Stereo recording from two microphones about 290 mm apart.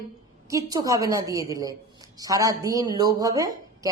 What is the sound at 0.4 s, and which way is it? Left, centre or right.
A woman's voice, centre.